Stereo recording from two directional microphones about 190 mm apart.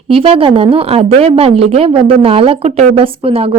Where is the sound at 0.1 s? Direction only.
30° right (ahead or behind).